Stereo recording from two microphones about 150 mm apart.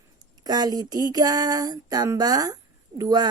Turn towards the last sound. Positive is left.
turn(degrees=-25)  # may be behind; listen again after turning